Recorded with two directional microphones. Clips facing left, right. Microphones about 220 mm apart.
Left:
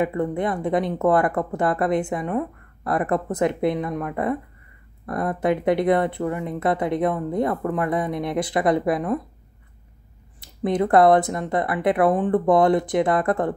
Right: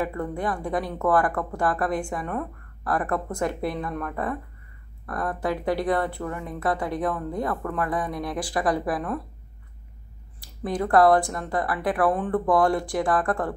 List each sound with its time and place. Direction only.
0.0 s speech: 20° left (ahead or behind)
10.4 s speech: 20° left (ahead or behind)